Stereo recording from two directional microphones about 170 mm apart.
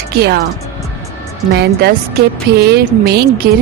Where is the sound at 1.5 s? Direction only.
75° right (ahead or behind).